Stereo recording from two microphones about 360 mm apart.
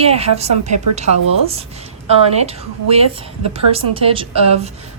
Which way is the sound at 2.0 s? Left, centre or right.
Centre.